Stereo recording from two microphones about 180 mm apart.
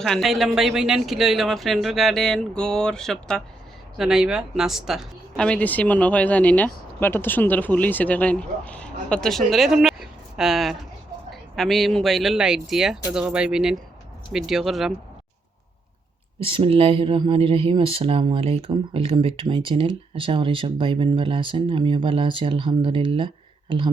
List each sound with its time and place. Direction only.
0.0 s speech: centre (ahead or behind)
16.4 s speech: 30° right (ahead or behind)